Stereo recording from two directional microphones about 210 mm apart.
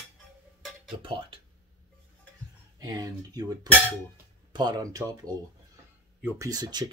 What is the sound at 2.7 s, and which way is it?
Speech, 20° right (ahead or behind).